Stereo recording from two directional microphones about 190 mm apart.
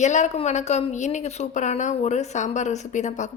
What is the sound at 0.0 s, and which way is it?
A woman's voice, 40° left (ahead or behind).